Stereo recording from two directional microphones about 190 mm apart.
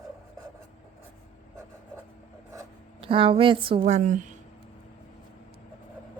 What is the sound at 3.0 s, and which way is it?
Speech, 30° right (ahead or behind).